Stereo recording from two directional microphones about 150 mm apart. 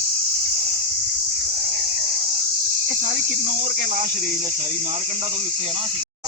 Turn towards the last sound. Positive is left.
turn(degrees=-40)  # may be behind; listen again after turning